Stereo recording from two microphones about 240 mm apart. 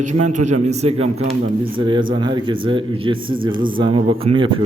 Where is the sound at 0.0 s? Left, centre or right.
Right.